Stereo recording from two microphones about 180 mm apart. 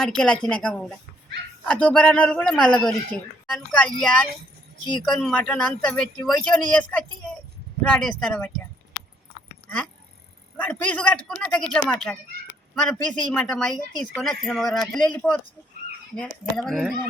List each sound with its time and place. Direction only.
0.0 s a man's voice: 5° left (ahead or behind)
9.6 s a man's voice: 5° left (ahead or behind)